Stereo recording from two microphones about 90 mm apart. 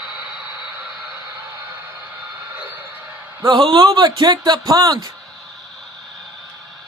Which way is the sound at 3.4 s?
55° right (ahead or behind).